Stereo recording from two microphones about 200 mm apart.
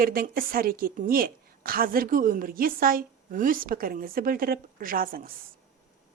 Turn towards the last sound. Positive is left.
turn(degrees=-45)  # may be behind; listen again after turning